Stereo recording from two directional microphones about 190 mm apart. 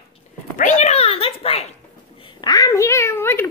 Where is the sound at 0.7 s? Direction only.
35° left (ahead or behind).